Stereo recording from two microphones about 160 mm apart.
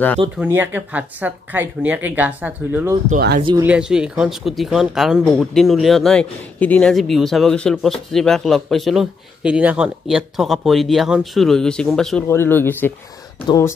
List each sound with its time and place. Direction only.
0.4 s speech: 10° right (ahead or behind)
3.2 s speech: 80° right
3.6 s speech: 5° right (ahead or behind)
12.3 s speech: 15° left (ahead or behind)